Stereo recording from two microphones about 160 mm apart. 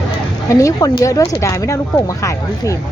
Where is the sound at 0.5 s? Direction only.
20° left (ahead or behind).